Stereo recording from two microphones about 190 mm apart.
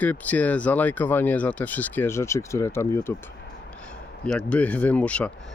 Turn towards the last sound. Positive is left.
turn(degrees=5)  # may be behind; listen again after turning